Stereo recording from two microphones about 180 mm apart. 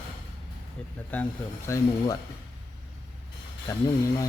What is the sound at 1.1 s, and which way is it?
A man's voice, 10° left (ahead or behind).